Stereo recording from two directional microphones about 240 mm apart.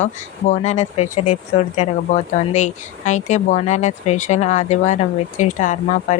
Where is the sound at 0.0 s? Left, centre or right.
Left.